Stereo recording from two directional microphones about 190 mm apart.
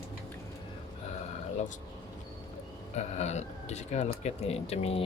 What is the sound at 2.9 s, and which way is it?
Speech, 35° left (ahead or behind).